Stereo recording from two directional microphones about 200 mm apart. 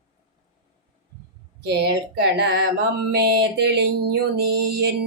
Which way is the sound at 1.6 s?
55° right (ahead or behind).